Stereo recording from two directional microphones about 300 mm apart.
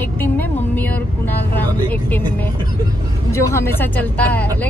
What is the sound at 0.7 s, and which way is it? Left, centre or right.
Vehicle, centre.